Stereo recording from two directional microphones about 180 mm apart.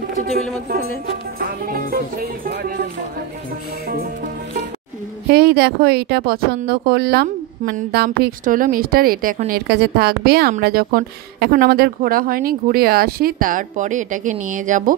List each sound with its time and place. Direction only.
1.4 s speech: 55° right (ahead or behind)
5.3 s speech: 60° right (ahead or behind)
9.5 s speech: 65° right (ahead or behind); by 15.0 s 45° right (ahead or behind)